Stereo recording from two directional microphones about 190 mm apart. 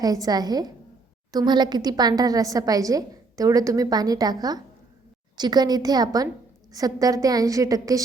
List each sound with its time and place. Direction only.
0.0 s a woman's voice: 20° right (ahead or behind)